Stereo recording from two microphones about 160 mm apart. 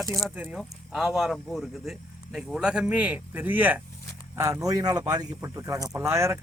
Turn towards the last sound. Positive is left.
turn(degrees=-15)  # may be behind; listen again after turning